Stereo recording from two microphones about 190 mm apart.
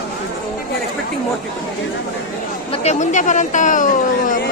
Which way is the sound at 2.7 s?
35° left (ahead or behind).